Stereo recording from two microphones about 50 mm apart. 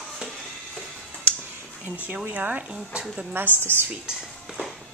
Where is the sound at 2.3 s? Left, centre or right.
Right.